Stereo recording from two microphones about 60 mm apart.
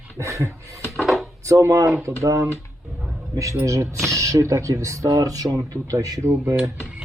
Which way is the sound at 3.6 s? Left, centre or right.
Right.